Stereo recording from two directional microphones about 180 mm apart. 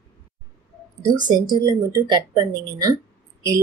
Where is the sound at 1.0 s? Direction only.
25° right (ahead or behind).